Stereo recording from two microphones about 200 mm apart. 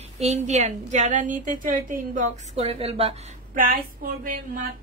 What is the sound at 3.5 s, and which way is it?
A woman's voice, 45° right (ahead or behind).